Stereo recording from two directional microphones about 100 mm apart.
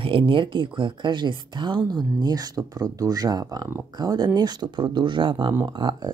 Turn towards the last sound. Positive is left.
turn(degrees=-50)  # may be behind; listen again after turning